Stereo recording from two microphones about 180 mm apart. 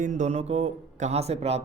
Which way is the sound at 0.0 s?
40° right (ahead or behind).